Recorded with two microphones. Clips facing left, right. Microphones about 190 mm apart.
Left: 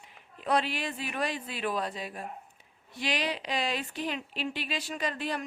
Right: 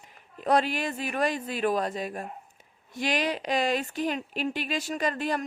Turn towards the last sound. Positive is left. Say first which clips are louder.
# right 5 dB
turn(degrees=-45)  # may be behind; listen again after turning